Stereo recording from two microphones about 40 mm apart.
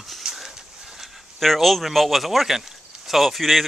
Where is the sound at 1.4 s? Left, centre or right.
Centre.